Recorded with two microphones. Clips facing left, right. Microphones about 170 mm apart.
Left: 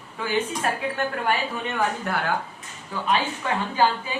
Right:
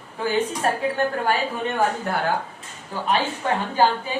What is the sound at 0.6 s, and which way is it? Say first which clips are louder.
A woman's voice: right 4 dB; 30° right (ahead or behind).